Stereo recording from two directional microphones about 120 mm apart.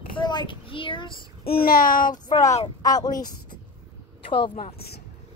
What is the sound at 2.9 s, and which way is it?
Speech, 30° left (ahead or behind).